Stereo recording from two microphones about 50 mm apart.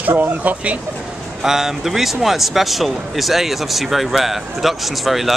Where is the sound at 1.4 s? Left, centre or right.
Centre.